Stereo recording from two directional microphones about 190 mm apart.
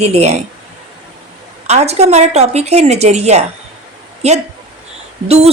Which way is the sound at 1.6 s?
35° right (ahead or behind).